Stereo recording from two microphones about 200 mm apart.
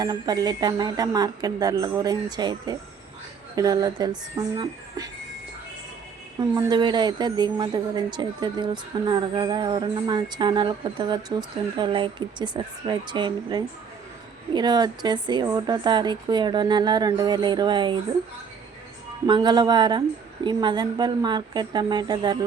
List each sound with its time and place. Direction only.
0.0 s speech: 20° right (ahead or behind)
6.4 s speech: 20° right (ahead or behind)
19.2 s speech: 20° right (ahead or behind)